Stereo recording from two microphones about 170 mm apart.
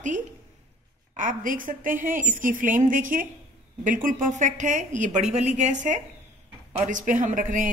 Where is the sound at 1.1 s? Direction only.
50° right (ahead or behind).